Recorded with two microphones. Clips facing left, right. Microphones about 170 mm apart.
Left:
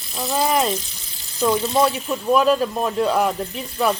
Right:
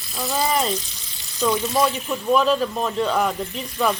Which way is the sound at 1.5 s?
25° left (ahead or behind).